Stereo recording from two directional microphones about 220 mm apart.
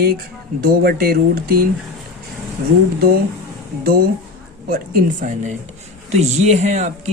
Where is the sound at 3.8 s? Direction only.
45° right (ahead or behind).